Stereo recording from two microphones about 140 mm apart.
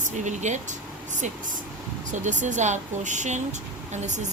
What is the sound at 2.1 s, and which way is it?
A woman's voice, 60° right (ahead or behind).